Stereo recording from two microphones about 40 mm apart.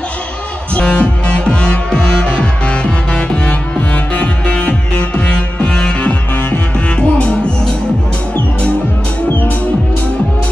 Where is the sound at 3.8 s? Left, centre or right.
Left.